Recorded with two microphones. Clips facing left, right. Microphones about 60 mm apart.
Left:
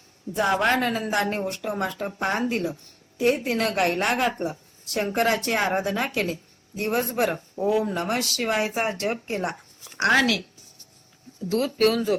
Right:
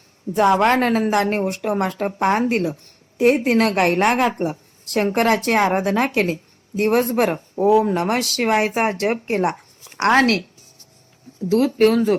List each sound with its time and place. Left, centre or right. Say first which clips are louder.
0.3 s a woman's voice: right 7 dB; right
0.6 s a woman's voice: right 6 dB; right
11.4 s speech: right 6 dB; right